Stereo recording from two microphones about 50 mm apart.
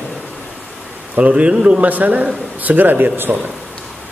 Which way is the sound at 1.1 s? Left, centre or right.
Right.